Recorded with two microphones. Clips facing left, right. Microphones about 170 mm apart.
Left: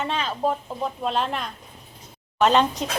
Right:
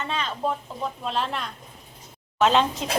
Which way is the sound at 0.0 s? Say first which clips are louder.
Left 3 dB; 5° left (ahead or behind).